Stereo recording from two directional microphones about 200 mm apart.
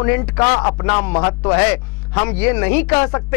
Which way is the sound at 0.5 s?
25° left (ahead or behind).